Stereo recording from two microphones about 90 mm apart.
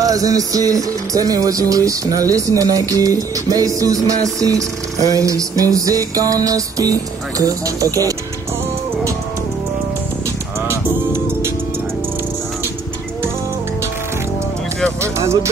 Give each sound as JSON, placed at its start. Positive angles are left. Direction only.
{"t": 0.0, "sound": "music", "side_deg": -40}
{"t": 10.7, "sound": "music", "side_deg": -30}
{"t": 15.0, "sound": "music", "side_deg": -30}